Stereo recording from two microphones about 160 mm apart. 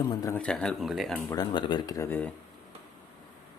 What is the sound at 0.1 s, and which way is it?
Speech, 25° left (ahead or behind).